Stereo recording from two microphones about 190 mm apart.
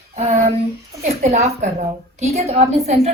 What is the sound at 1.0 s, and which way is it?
A woman's voice, 35° right (ahead or behind).